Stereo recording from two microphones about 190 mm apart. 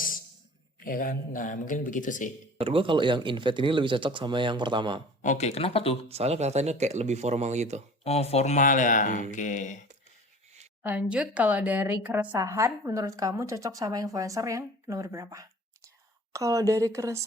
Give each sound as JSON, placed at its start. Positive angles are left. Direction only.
{"t": 0.9, "sound": "speech", "side_deg": 50}
{"t": 2.6, "sound": "speech", "side_deg": -30}
{"t": 5.2, "sound": "speech", "side_deg": 40}
{"t": 6.1, "sound": "speech", "side_deg": -30}
{"t": 8.0, "sound": "speech", "side_deg": 35}
{"t": 10.8, "sound": "speech", "side_deg": -5}